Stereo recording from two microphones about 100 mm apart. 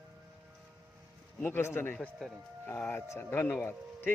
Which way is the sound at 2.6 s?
20° left (ahead or behind).